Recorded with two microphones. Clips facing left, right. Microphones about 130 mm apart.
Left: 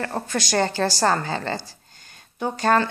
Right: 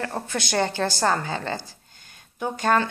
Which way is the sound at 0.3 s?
15° right (ahead or behind).